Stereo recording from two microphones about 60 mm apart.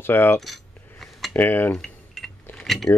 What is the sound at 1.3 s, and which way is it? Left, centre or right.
Speech, left.